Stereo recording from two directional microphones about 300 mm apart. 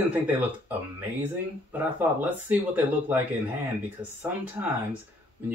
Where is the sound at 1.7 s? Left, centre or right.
Centre.